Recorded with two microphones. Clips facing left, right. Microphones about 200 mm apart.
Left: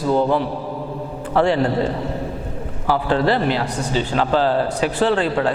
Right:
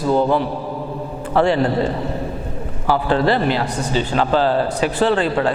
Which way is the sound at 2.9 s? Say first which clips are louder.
Right 1 dB; 25° right (ahead or behind).